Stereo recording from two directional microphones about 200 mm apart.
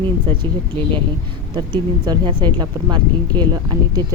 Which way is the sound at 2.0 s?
20° right (ahead or behind).